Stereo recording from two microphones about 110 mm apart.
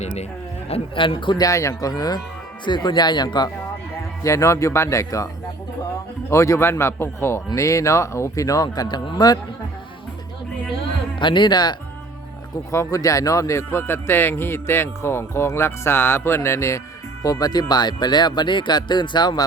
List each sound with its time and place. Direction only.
0.0 s speech: 90° left
0.7 s a man's voice: 50° left (ahead or behind)
1.5 s speech: 30° left (ahead or behind)
4.2 s a man's voice: 30° left (ahead or behind)
6.3 s a man's voice: 25° left (ahead or behind)
11.2 s a man's voice: 45° left (ahead or behind)
12.7 s a man's voice: 30° left (ahead or behind)